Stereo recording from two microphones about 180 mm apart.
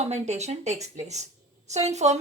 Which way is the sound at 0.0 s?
40° right (ahead or behind).